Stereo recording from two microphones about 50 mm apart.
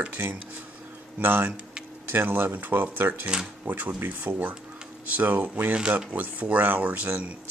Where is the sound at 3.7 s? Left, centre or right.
Right.